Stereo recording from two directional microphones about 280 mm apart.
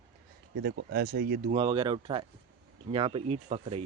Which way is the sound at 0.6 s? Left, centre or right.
Right.